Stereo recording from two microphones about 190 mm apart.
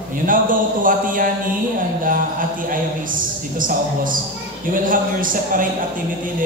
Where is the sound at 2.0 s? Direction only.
45° right (ahead or behind).